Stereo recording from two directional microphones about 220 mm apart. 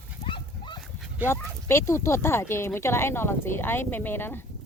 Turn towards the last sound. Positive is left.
turn(degrees=10)  # may be behind; listen again after turning